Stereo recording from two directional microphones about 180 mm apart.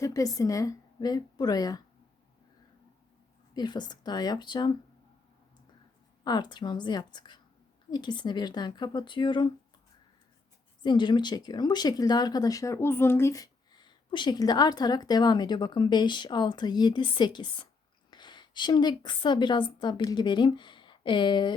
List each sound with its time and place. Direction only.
0.0 s speech: 20° left (ahead or behind)
3.5 s speech: 25° left (ahead or behind)
6.2 s speech: 25° left (ahead or behind)
10.8 s a woman's voice: 25° left (ahead or behind)